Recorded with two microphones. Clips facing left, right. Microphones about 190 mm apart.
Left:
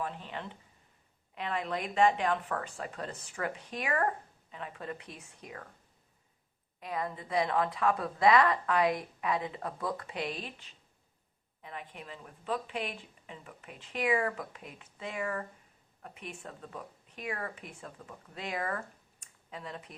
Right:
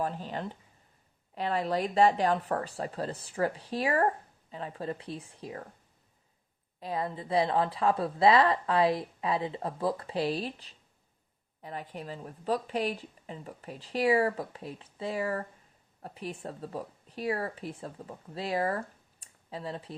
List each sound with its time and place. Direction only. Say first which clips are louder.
0.0 s a woman's voice: right 5 dB; 35° right (ahead or behind)
6.7 s a woman's voice: right 3 dB; 30° right (ahead or behind)